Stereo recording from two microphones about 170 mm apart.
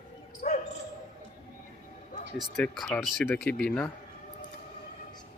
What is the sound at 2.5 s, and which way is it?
Speech, 5° left (ahead or behind).